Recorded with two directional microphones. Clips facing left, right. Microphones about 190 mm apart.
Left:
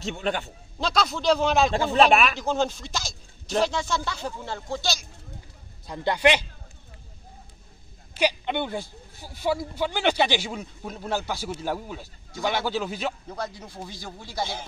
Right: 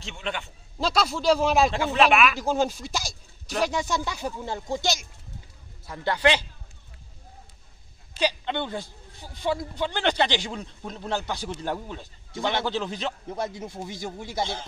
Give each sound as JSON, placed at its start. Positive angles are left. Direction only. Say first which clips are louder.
{"t": 0.0, "sound": "speech", "louder": "left 5 dB", "side_deg": 40}
{"t": 0.7, "sound": "speech", "louder": "right 1 dB", "side_deg": -5}
{"t": 1.7, "sound": "speech", "louder": "left 2 dB", "side_deg": 35}
{"t": 2.3, "sound": "speech", "louder": "right 1 dB", "side_deg": -10}
{"t": 5.9, "sound": "speech", "louder": "left 2 dB", "side_deg": 15}
{"t": 8.2, "sound": "speech", "louder": "left 2 dB", "side_deg": 15}
{"t": 13.6, "sound": "speech", "louder": "right 5 dB", "side_deg": -20}